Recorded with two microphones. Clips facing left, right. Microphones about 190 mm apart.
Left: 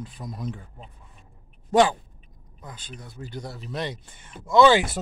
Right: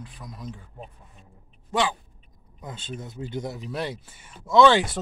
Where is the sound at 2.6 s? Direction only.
25° right (ahead or behind); by 4.6 s 5° right (ahead or behind).